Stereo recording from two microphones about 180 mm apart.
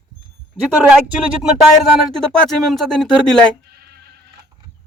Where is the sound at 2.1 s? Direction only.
5° left (ahead or behind).